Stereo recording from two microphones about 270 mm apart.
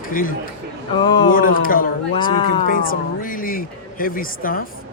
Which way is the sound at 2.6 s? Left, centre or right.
Left.